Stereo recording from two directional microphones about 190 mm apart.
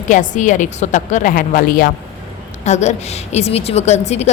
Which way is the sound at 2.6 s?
35° left (ahead or behind).